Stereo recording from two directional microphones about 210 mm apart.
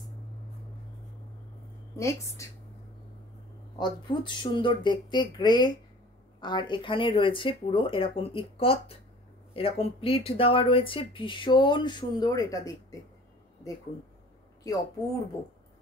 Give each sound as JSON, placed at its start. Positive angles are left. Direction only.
{"t": 2.0, "sound": "speech", "side_deg": 15}
{"t": 3.7, "sound": "speech", "side_deg": 20}
{"t": 14.7, "sound": "speech", "side_deg": 15}